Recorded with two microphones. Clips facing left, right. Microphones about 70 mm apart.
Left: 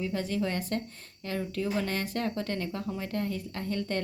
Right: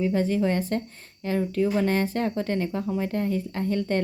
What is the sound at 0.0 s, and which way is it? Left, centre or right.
Speech, right.